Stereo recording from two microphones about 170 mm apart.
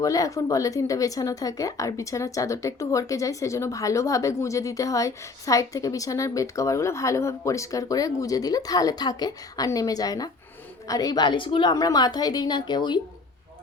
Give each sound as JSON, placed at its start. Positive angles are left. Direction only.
{"t": 0.0, "sound": "speech", "side_deg": 20}